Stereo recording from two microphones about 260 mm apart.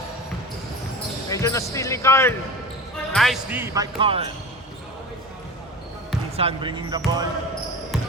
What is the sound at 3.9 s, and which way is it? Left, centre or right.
Speech, right.